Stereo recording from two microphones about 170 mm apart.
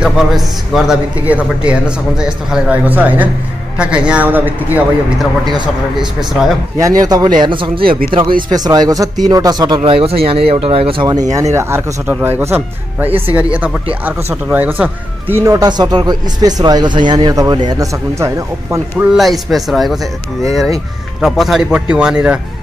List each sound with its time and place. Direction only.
0.0 s a man's voice: 5° right (ahead or behind)
7.0 s speech: 25° right (ahead or behind)
9.8 s speech: 35° right (ahead or behind)
11.5 s speech: 15° right (ahead or behind)
19.1 s a man's voice: centre (ahead or behind)
21.2 s a man's voice: centre (ahead or behind)